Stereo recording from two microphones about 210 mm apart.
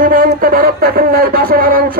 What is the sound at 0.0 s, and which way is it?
Speech, 40° right (ahead or behind).